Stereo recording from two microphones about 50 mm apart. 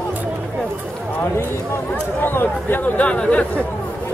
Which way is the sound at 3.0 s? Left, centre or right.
Left.